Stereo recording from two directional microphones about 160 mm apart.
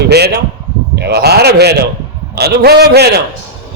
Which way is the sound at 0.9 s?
90° right.